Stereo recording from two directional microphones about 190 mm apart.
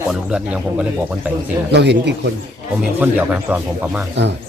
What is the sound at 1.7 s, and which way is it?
Speech, 60° right (ahead or behind).